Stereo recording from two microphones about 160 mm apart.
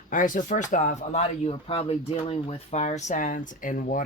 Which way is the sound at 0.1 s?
55° left (ahead or behind).